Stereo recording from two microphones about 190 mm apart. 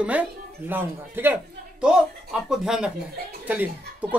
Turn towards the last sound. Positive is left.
turn(degrees=-10)  # may be behind; listen again after turning